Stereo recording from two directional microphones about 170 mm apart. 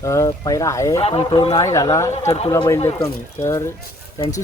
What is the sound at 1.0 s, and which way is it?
Speech, 35° left (ahead or behind).